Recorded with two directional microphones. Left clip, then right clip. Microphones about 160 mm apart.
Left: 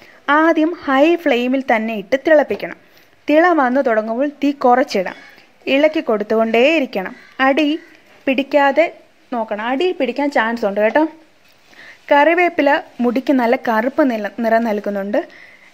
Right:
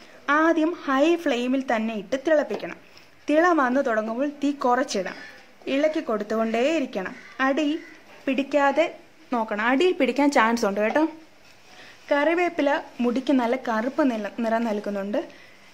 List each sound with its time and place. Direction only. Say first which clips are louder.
0.3 s a sound: left 7 dB; 30° left (ahead or behind)
0.7 s speech: left 8 dB; 30° left (ahead or behind)
9.3 s speech: left 3 dB; 10° left (ahead or behind)
10.8 s speech: left 10 dB; 25° left (ahead or behind)
12.1 s speech: left 10 dB; 30° left (ahead or behind)